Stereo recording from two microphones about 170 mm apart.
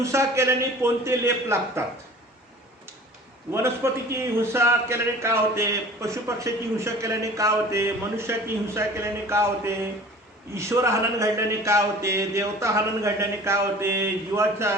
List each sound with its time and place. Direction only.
0.0 s a man's voice: 15° right (ahead or behind)
4.1 s a man's voice: 15° right (ahead or behind)